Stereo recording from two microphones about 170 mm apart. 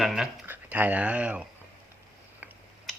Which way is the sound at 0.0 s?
Centre (ahead or behind).